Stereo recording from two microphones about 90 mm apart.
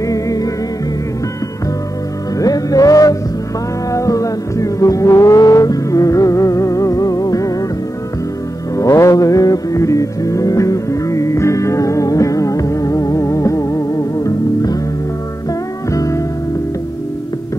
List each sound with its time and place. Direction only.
0.1 s music: 40° left (ahead or behind)
2.3 s music: 45° left (ahead or behind)
8.7 s music: 35° left (ahead or behind)
15.9 s music: 35° left (ahead or behind)